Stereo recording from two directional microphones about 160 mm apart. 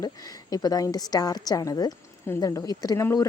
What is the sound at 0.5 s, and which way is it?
A woman's voice, 25° left (ahead or behind).